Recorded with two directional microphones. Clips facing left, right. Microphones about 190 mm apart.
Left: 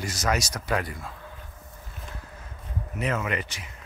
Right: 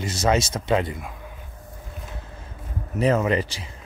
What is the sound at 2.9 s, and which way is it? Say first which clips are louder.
Speech: right 8 dB; 35° right (ahead or behind).